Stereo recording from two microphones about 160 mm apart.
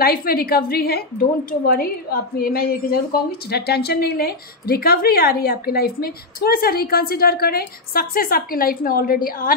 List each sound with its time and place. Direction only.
0.0 s a woman's voice: 70° left (ahead or behind)